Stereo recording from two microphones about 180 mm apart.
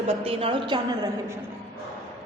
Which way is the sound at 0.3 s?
30° right (ahead or behind).